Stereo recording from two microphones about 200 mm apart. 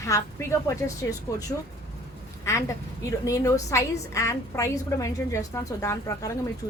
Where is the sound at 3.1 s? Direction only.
15° left (ahead or behind).